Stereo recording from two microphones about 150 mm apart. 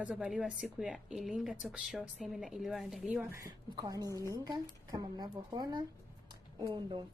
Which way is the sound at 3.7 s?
25° right (ahead or behind).